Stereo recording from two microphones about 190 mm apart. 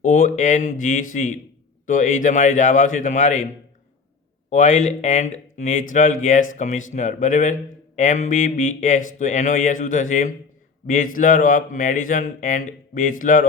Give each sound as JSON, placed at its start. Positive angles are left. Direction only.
{"t": 0.0, "sound": "a man's voice", "side_deg": 40}
{"t": 4.4, "sound": "a man's voice", "side_deg": 40}